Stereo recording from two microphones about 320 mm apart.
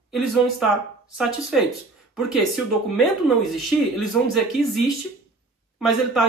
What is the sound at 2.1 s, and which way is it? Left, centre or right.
Speech, centre.